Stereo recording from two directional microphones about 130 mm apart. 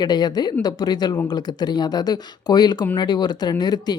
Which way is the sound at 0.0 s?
30° left (ahead or behind).